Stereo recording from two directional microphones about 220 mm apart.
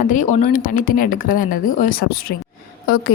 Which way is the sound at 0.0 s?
35° left (ahead or behind).